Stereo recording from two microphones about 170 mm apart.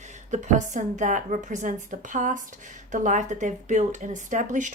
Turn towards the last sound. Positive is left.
turn(degrees=-50)  # may be behind; listen again after turning